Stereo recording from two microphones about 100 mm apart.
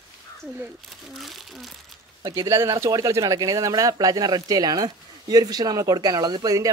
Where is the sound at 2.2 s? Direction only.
40° right (ahead or behind).